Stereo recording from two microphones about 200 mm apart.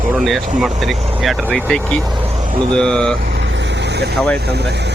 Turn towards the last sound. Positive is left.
turn(degrees=5)  # may be behind; listen again after turning